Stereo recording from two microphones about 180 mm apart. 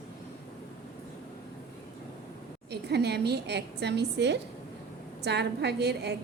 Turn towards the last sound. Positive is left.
turn(degrees=-65)  # may be behind; listen again after turning